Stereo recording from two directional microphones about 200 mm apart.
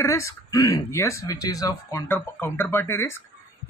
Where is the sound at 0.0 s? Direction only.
15° left (ahead or behind).